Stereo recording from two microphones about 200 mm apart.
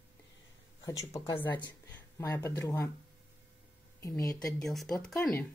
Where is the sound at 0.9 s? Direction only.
15° left (ahead or behind).